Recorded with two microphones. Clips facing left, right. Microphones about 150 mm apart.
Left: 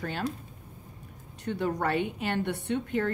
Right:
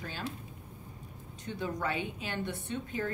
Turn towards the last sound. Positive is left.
turn(degrees=70)  # may be behind; listen again after turning